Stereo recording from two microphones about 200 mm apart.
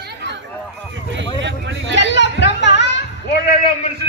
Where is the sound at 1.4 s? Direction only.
65° right (ahead or behind).